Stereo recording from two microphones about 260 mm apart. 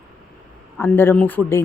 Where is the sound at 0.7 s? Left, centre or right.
Centre.